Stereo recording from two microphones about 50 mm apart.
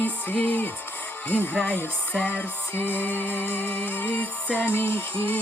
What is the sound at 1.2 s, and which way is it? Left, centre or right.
Speech, left.